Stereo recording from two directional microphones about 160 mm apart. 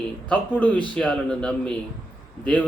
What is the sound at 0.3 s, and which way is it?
A man's voice, 10° left (ahead or behind).